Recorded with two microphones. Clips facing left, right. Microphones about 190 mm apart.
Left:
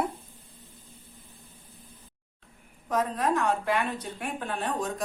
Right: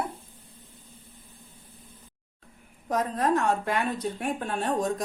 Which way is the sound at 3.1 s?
45° right (ahead or behind).